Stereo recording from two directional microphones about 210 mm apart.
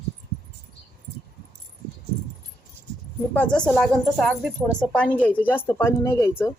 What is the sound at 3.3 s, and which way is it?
A woman's voice, 5° left (ahead or behind).